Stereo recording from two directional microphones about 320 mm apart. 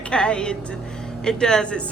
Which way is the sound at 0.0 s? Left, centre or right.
Centre.